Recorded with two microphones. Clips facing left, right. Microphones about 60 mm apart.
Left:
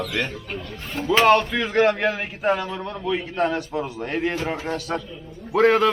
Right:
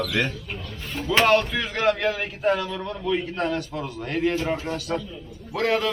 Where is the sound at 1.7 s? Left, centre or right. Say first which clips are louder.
Left 3 dB; centre.